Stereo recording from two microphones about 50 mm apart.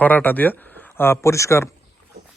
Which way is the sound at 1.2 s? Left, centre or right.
Left.